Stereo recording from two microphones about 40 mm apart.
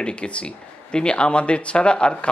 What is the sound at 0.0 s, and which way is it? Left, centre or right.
A man's voice, left.